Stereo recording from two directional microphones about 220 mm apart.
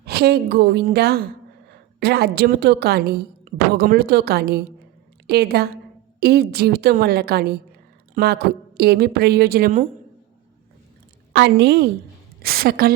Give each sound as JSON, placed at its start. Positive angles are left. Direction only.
{"t": 0.0, "sound": "a woman's voice", "side_deg": -45}
{"t": 11.3, "sound": "a woman's voice", "side_deg": -50}